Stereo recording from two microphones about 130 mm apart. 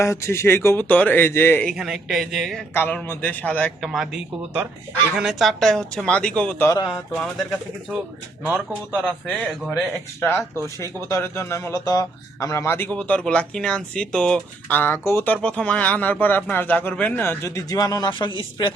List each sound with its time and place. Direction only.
0.0 s speech: 20° left (ahead or behind)
1.6 s speech: centre (ahead or behind)
2.7 s a man's voice: 15° left (ahead or behind)
3.8 s speech: 5° right (ahead or behind)
6.7 s speech: 25° left (ahead or behind)
8.4 s speech: 15° right (ahead or behind)
10.2 s a man's voice: 15° left (ahead or behind); by 18.3 s 35° left (ahead or behind)